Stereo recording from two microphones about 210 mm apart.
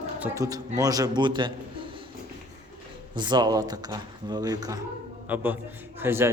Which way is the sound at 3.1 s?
20° right (ahead or behind).